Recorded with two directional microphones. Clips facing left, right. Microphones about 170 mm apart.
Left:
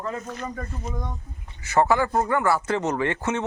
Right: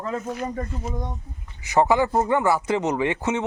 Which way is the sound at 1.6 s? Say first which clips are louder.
Right 1 dB; 15° right (ahead or behind).